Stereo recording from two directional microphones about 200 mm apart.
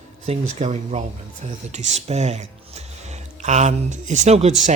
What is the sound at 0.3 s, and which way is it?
Speech, 35° right (ahead or behind).